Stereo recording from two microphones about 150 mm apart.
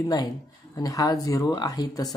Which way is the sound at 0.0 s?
25° left (ahead or behind).